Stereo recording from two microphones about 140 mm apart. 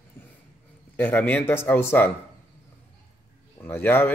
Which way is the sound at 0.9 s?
15° left (ahead or behind).